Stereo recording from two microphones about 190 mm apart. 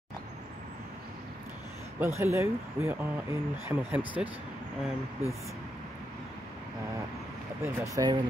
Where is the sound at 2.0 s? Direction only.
15° right (ahead or behind).